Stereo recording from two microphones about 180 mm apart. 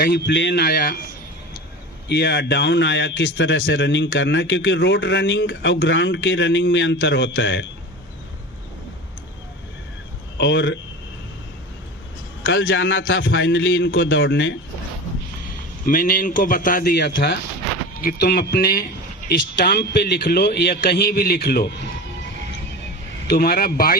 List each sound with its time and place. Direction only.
0.0 s a man's voice: 75° left (ahead or behind); by 0.9 s 55° left (ahead or behind)
2.0 s speech: 65° left (ahead or behind); by 7.7 s 90° left
10.3 s speech: 85° left
12.4 s speech: 90° left
15.9 s a man's voice: 50° left (ahead or behind)
23.2 s a man's voice: 60° left (ahead or behind)